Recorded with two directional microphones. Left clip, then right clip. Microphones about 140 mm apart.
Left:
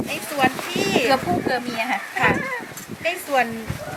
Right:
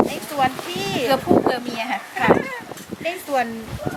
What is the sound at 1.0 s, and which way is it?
Speech, 5° right (ahead or behind).